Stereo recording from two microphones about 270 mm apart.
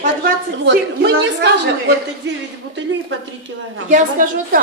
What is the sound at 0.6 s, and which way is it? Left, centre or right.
Speech, right.